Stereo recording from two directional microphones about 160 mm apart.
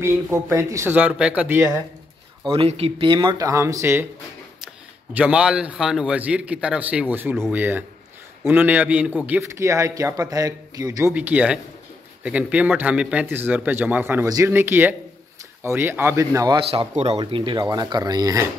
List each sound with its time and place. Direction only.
0.0 s speech: 15° right (ahead or behind)
2.5 s a man's voice: 35° right (ahead or behind); by 4.0 s 15° right (ahead or behind)
5.1 s a man's voice: 5° right (ahead or behind)
11.1 s speech: 10° right (ahead or behind)
16.5 s a man's voice: 40° right (ahead or behind)
17.2 s a man's voice: 30° right (ahead or behind)